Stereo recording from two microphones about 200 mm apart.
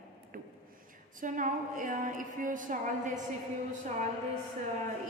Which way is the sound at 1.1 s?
40° right (ahead or behind).